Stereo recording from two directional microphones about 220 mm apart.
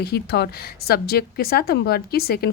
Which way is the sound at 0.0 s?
45° left (ahead or behind).